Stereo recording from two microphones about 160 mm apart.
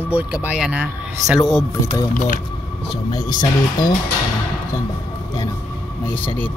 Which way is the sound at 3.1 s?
25° left (ahead or behind).